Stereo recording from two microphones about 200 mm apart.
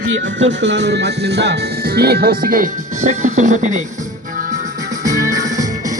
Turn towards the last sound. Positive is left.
turn(degrees=-40)  # may be behind; listen again after turning